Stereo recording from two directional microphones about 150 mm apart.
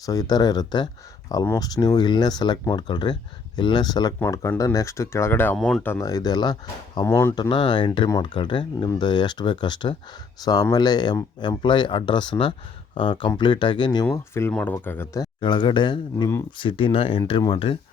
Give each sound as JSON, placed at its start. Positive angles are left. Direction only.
{"t": 0.0, "sound": "speech", "side_deg": 25}
{"t": 5.5, "sound": "speech", "side_deg": 0}
{"t": 5.8, "sound": "speech", "side_deg": 20}
{"t": 7.4, "sound": "speech", "side_deg": 30}